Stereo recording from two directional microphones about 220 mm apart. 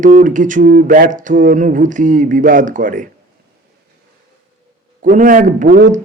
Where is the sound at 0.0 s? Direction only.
35° right (ahead or behind).